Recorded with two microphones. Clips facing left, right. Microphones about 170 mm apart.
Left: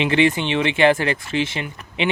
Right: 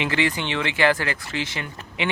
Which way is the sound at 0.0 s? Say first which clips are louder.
Left 6 dB; 25° left (ahead or behind).